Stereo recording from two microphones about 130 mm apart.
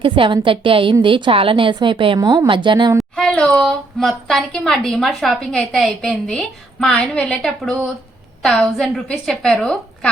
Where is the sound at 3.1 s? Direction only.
5° left (ahead or behind).